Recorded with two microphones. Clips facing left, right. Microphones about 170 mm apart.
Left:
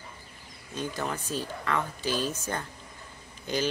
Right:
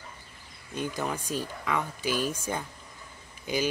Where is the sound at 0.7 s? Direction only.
15° right (ahead or behind).